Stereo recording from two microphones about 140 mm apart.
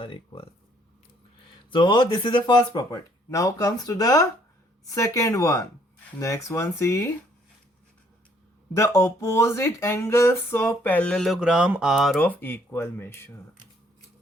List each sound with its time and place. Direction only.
0.0 s speech: 40° left (ahead or behind)
1.7 s speech: 35° left (ahead or behind)
8.7 s speech: 20° left (ahead or behind); by 12.3 s centre (ahead or behind)
12.3 s speech: 15° left (ahead or behind)